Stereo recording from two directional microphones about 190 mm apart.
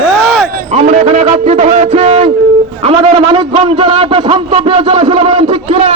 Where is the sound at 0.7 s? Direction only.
35° right (ahead or behind).